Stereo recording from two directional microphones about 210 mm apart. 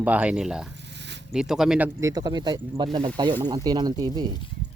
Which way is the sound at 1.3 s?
Centre (ahead or behind).